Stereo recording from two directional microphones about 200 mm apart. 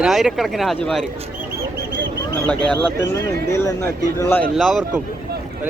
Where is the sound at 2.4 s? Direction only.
5° left (ahead or behind).